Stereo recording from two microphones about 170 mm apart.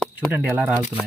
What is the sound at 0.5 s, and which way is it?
Speech, 5° right (ahead or behind).